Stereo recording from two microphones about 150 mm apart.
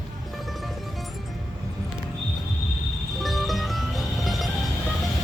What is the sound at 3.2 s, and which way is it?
Music, centre (ahead or behind).